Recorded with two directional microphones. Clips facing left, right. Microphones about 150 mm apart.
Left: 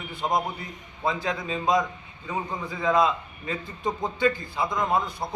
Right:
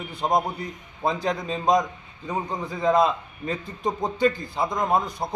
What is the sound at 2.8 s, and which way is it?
A man's voice, 40° right (ahead or behind).